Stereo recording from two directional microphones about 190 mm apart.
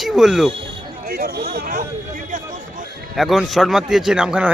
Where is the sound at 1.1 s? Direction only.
55° right (ahead or behind).